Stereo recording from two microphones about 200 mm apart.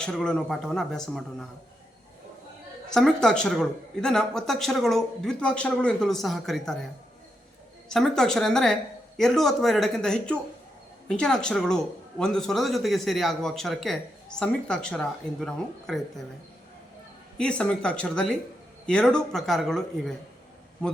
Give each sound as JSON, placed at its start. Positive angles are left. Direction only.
{"t": 0.0, "sound": "a man's voice", "side_deg": 0}
{"t": 2.9, "sound": "a man's voice", "side_deg": 0}
{"t": 7.9, "sound": "a man's voice", "side_deg": 0}
{"t": 17.3, "sound": "a man's voice", "side_deg": 5}